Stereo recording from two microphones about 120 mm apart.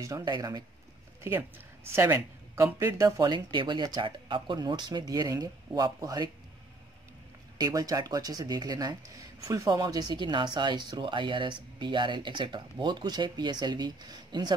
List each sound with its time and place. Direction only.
0.0 s speech: 30° right (ahead or behind)
2.0 s a man's voice: 20° right (ahead or behind)
7.5 s speech: 30° right (ahead or behind)